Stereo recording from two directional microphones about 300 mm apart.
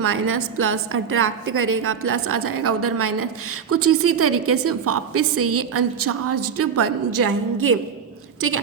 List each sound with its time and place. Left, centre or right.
0.0 s a woman's voice: right